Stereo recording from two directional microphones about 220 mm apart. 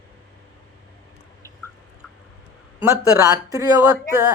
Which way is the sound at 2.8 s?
15° right (ahead or behind).